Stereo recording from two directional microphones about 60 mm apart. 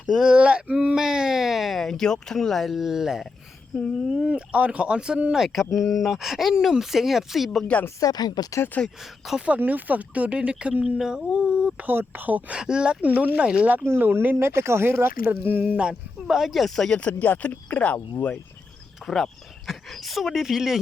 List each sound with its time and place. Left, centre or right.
0.3 s speech: centre
4.3 s speech: centre
5.5 s speech: centre
7.9 s speech: left
8.8 s speech: centre
9.5 s speech: right
11.9 s speech: right
12.5 s speech: centre
13.8 s speech: right
15.6 s speech: centre
16.2 s speech: centre
17.0 s speech: left
19.0 s speech: centre